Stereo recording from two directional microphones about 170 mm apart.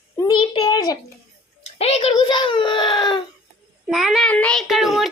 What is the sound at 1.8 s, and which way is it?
A woman's voice, 35° left (ahead or behind).